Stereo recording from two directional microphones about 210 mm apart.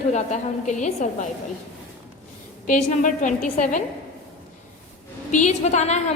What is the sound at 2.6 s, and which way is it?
A woman's voice, 35° left (ahead or behind).